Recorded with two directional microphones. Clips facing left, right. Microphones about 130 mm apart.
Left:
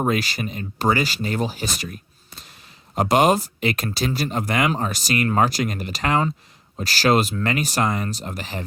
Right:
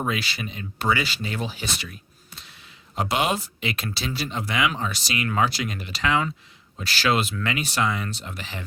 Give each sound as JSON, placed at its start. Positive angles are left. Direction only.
{"t": 0.0, "sound": "speech", "side_deg": 45}